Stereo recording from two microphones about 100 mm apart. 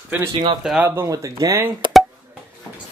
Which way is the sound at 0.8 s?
30° right (ahead or behind).